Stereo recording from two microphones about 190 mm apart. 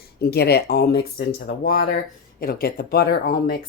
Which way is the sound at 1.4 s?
45° left (ahead or behind).